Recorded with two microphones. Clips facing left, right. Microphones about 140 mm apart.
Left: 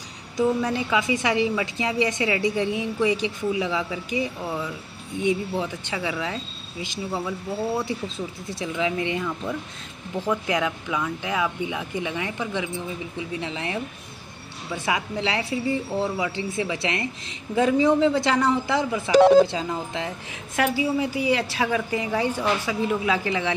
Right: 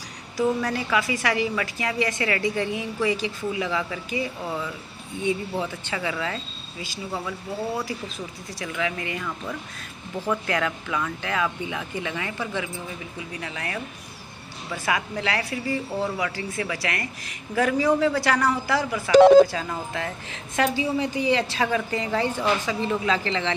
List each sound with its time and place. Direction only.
0.7 s a woman's voice: 20° left (ahead or behind)
4.5 s a woman's voice: 5° left (ahead or behind)